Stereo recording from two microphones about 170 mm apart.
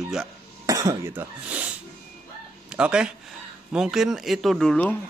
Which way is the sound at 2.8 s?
5° right (ahead or behind).